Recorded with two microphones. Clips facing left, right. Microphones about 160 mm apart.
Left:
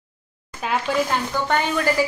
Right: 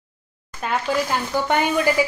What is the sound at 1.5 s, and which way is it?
Speech, 10° right (ahead or behind).